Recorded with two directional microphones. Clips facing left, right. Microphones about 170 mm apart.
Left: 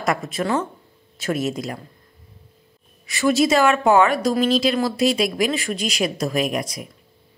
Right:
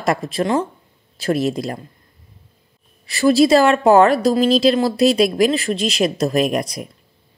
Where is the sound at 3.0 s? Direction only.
35° right (ahead or behind).